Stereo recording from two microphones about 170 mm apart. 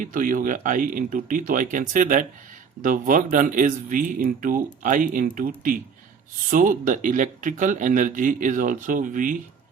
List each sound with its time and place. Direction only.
0.0 s speech: 50° right (ahead or behind)
6.5 s speech: 50° right (ahead or behind)